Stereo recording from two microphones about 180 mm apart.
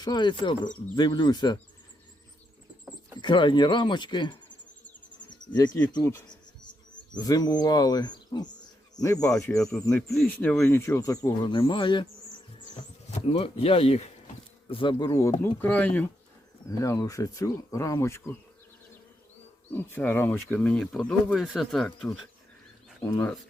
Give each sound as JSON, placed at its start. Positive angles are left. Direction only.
{"t": 0.0, "sound": "speech", "side_deg": 25}
{"t": 3.2, "sound": "speech", "side_deg": 25}
{"t": 5.5, "sound": "speech", "side_deg": 20}
{"t": 6.2, "sound": "bird", "side_deg": 25}
{"t": 9.8, "sound": "speech", "side_deg": 15}
{"t": 10.2, "sound": "speech", "side_deg": 5}
{"t": 13.1, "sound": "speech", "side_deg": 35}
{"t": 19.7, "sound": "speech", "side_deg": 10}
{"t": 23.0, "sound": "speech", "side_deg": 15}